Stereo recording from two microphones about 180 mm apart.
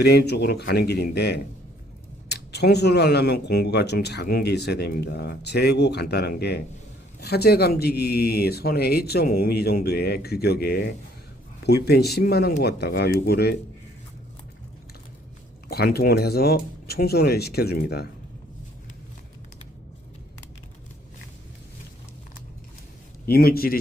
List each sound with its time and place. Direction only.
0.0 s speech: 65° left (ahead or behind)
15.7 s speech: 60° left (ahead or behind)
23.2 s speech: 55° left (ahead or behind)